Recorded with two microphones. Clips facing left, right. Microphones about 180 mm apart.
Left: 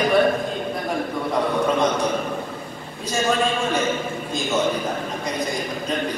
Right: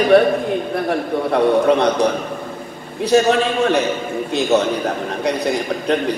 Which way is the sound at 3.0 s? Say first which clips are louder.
Right 8 dB; 70° right (ahead or behind).